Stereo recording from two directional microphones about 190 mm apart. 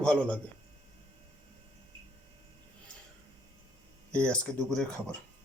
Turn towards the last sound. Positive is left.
turn(degrees=5)  # may be behind; listen again after turning